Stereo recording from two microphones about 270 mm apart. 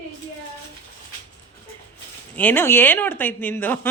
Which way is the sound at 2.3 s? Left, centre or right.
Centre.